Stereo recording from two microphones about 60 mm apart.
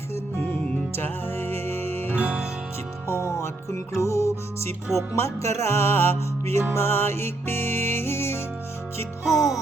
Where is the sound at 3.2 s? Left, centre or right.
Left.